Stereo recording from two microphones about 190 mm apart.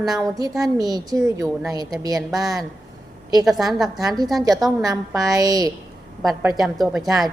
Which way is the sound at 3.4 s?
Centre (ahead or behind).